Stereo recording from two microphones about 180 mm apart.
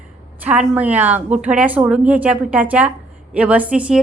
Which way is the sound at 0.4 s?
5° right (ahead or behind).